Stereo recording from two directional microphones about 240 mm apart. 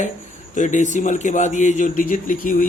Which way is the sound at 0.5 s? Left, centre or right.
Left.